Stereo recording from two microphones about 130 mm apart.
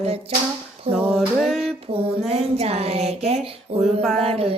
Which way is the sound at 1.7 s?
45° right (ahead or behind).